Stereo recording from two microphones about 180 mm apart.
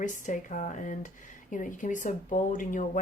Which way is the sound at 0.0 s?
45° left (ahead or behind).